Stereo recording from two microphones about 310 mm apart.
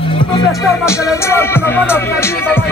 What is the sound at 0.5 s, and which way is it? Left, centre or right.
Music, centre.